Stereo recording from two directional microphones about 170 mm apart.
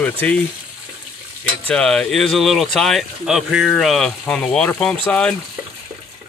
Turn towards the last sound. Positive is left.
turn(degrees=5)  # may be behind; listen again after turning